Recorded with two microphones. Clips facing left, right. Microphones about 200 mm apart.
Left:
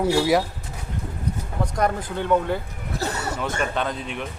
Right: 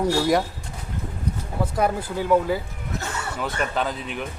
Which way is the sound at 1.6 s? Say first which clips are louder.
Right 1 dB; 5° right (ahead or behind).